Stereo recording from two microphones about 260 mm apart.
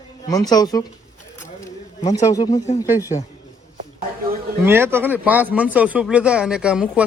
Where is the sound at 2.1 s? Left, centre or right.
Centre.